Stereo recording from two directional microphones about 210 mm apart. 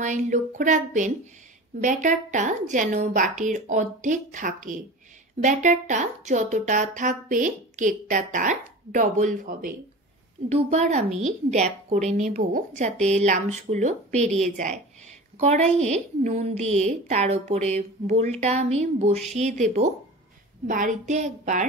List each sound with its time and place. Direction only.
0.0 s speech: 35° right (ahead or behind)